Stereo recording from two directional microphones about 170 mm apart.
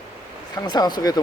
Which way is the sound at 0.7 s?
25° left (ahead or behind).